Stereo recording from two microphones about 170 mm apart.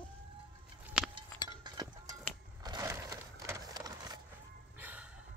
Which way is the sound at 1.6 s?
25° right (ahead or behind).